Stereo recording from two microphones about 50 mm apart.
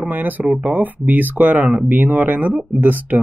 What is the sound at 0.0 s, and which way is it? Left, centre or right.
Speech, right.